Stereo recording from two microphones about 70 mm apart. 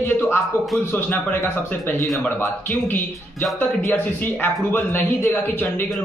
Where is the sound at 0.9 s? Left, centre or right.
Left.